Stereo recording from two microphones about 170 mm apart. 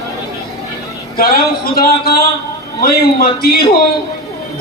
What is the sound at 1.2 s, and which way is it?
Speech, 65° left (ahead or behind).